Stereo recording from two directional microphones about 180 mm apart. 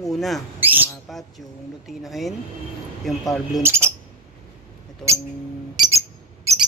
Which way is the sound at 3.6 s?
15° right (ahead or behind).